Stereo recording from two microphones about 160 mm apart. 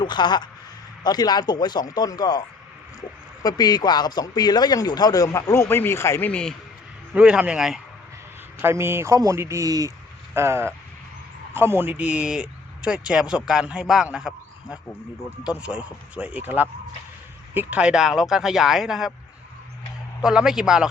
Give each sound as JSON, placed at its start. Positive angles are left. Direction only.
{"t": 0.0, "sound": "speech", "side_deg": 25}
{"t": 3.4, "sound": "speech", "side_deg": 25}
{"t": 7.1, "sound": "speech", "side_deg": -5}
{"t": 8.6, "sound": "speech", "side_deg": -15}
{"t": 20.2, "sound": "speech", "side_deg": -5}